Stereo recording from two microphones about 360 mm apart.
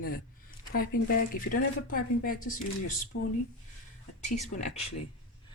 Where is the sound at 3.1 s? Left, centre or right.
Left.